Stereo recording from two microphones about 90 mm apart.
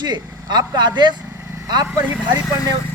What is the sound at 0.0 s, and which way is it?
Speech, 55° right (ahead or behind).